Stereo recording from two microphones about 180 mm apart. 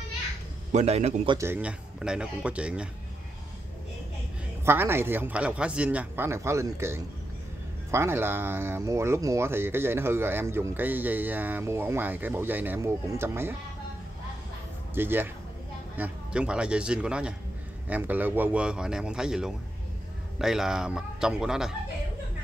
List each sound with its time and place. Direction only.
0.7 s a man's voice: 40° right (ahead or behind)
1.4 s speech: 10° right (ahead or behind)
4.6 s speech: 15° right (ahead or behind)
15.0 s speech: 10° right (ahead or behind)